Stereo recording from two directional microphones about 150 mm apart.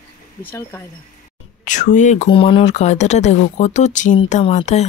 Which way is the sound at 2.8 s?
50° left (ahead or behind).